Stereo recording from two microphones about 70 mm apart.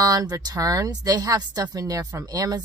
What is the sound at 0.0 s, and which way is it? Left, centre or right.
Speech, right.